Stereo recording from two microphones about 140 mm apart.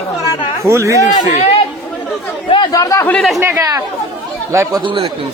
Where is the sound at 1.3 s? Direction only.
45° left (ahead or behind).